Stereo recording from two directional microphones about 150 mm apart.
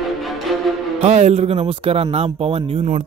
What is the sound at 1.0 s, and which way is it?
A man's voice, 45° right (ahead or behind).